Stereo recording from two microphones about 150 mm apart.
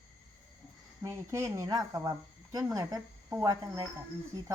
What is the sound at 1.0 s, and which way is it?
Speech, 20° right (ahead or behind).